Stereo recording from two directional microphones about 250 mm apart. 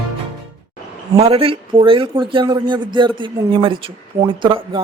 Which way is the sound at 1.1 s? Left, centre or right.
Right.